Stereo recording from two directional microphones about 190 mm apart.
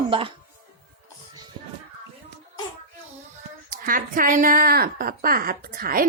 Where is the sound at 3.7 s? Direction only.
45° right (ahead or behind).